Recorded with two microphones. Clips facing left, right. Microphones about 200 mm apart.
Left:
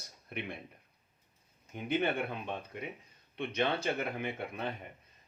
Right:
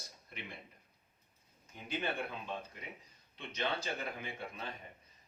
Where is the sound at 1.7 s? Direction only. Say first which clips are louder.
Left 7 dB; 60° left (ahead or behind).